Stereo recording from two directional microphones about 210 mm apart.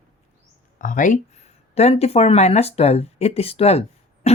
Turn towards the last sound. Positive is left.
turn(degrees=30)  # may be behind; listen again after turning